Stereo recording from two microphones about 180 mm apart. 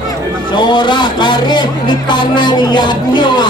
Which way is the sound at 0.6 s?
25° left (ahead or behind).